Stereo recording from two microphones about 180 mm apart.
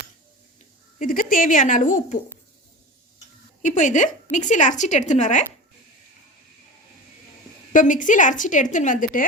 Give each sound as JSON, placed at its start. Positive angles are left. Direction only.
{"t": 0.9, "sound": "a woman's voice", "side_deg": 50}
{"t": 3.6, "sound": "a woman's voice", "side_deg": 45}
{"t": 7.7, "sound": "a woman's voice", "side_deg": 45}